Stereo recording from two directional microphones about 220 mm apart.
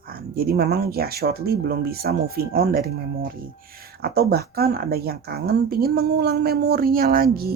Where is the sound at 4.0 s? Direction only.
45° right (ahead or behind).